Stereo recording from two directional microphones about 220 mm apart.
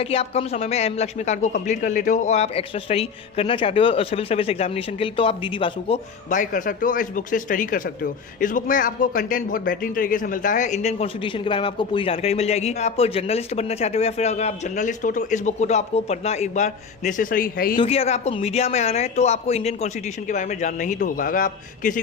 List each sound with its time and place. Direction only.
0.0 s speech: 25° left (ahead or behind)
6.3 s speech: 35° left (ahead or behind)
17.7 s speech: 25° left (ahead or behind)